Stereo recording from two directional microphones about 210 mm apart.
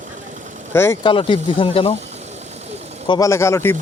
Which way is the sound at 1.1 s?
25° left (ahead or behind).